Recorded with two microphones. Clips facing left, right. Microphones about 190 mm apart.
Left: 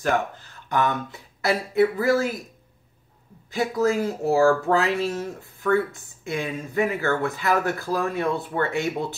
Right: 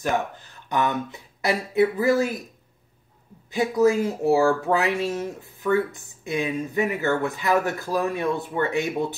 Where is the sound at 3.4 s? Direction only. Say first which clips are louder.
Right 3 dB; 20° right (ahead or behind).